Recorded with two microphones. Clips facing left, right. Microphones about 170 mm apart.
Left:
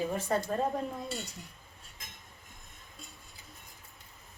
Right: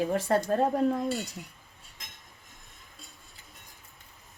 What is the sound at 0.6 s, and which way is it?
Speech, 65° right (ahead or behind).